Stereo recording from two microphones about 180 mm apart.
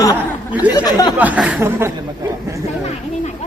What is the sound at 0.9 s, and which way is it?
Speech, 20° left (ahead or behind).